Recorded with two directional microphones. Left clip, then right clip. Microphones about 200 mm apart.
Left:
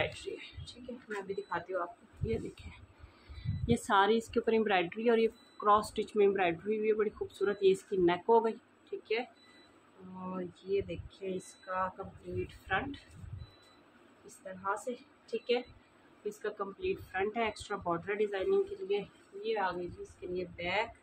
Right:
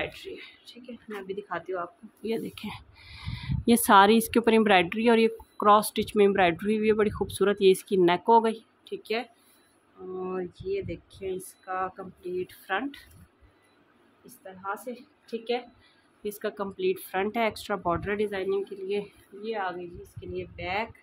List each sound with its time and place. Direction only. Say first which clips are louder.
0.0 s a sound: right 1 dB; 45° right (ahead or behind)
1.2 s a woman's voice: right 5 dB; 45° right (ahead or behind)
2.2 s a woman's voice: right 6 dB; 55° right (ahead or behind)
10.3 s a woman's voice: right 1 dB; 50° right (ahead or behind)
14.2 s a woman's voice: right 1 dB; 35° right (ahead or behind)
16.3 s a woman's voice: right 5 dB; 55° right (ahead or behind)